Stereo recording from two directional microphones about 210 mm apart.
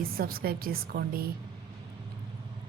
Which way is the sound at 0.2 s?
45° right (ahead or behind).